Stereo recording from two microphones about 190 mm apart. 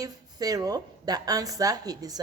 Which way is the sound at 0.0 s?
20° right (ahead or behind).